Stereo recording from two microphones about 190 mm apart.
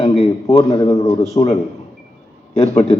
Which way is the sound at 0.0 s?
30° left (ahead or behind).